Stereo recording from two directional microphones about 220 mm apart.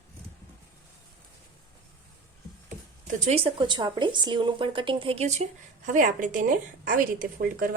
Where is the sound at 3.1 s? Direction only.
30° right (ahead or behind).